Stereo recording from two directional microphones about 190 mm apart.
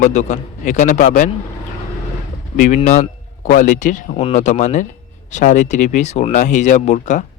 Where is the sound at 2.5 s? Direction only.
45° left (ahead or behind).